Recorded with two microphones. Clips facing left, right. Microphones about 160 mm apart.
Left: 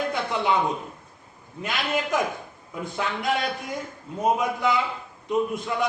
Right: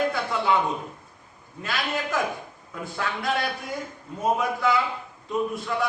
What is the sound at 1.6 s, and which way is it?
A man's voice, 20° left (ahead or behind).